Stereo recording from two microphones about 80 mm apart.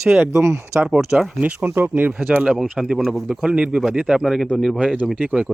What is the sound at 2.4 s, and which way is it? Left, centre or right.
Speech, centre.